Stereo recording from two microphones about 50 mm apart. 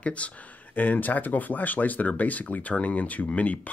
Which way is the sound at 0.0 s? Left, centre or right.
Left.